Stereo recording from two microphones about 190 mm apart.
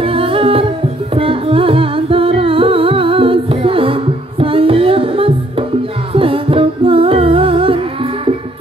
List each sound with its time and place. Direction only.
0.0 s humming: 30° right (ahead or behind)
1.1 s music: 30° right (ahead or behind)